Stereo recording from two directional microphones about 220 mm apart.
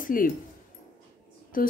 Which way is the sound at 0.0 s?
40° left (ahead or behind).